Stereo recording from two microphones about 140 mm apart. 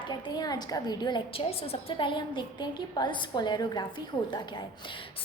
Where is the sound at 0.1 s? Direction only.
30° left (ahead or behind).